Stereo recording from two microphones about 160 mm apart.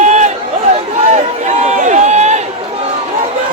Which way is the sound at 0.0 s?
50° right (ahead or behind).